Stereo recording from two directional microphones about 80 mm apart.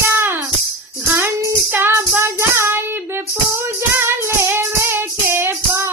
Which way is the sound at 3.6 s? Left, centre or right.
Right.